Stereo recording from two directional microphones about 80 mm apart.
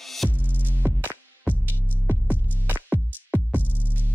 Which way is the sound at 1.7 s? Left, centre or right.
Left.